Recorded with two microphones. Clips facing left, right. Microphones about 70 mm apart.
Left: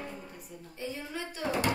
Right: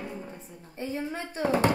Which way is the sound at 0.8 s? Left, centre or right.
Right.